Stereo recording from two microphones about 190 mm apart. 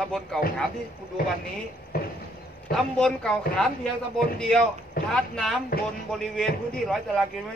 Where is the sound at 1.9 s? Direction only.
50° left (ahead or behind).